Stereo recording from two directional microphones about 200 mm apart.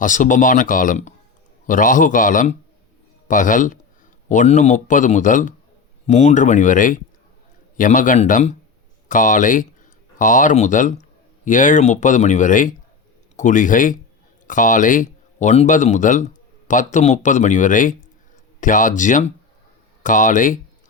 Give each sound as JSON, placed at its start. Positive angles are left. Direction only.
{"t": 0.0, "sound": "a man's voice", "side_deg": 40}